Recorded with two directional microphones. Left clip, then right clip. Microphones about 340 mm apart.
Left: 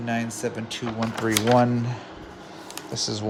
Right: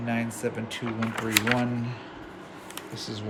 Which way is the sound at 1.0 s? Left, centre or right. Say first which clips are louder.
Left 2 dB; centre.